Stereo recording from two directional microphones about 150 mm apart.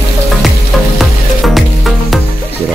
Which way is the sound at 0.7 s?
Centre (ahead or behind).